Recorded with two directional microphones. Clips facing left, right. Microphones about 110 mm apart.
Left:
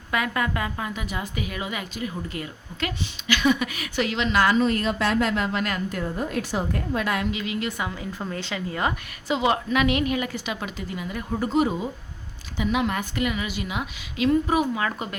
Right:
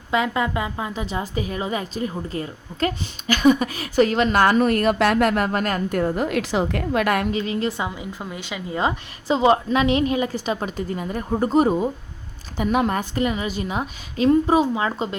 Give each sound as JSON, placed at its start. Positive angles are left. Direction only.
{"t": 0.1, "sound": "a woman's voice", "side_deg": -25}
{"t": 6.1, "sound": "a woman's voice", "side_deg": -80}
{"t": 7.3, "sound": "a woman's voice", "side_deg": -35}
{"t": 7.9, "sound": "a woman's voice", "side_deg": -15}
{"t": 9.2, "sound": "a woman's voice", "side_deg": -35}